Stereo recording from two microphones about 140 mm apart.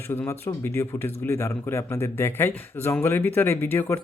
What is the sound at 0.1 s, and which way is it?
Speech, 15° left (ahead or behind).